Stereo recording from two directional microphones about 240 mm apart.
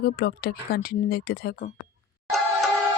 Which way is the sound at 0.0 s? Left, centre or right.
Left.